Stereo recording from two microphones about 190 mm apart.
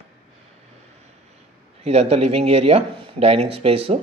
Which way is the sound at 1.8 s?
35° right (ahead or behind).